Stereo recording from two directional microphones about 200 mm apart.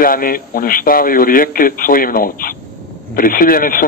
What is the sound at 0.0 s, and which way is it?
A man's voice, 45° left (ahead or behind).